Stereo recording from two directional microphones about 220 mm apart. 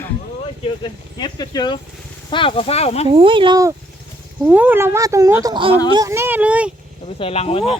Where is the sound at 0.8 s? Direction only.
20° left (ahead or behind).